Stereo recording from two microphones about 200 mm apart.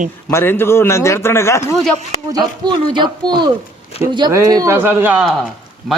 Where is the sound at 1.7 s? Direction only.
Centre (ahead or behind).